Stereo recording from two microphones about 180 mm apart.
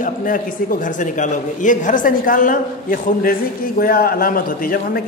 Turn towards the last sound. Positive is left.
turn(degrees=55)  # may be behind; listen again after turning